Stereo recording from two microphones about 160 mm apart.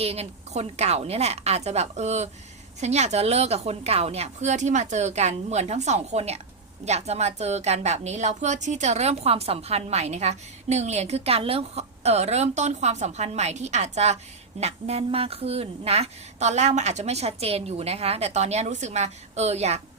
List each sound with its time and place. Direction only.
0.0 s a woman's voice: 40° right (ahead or behind)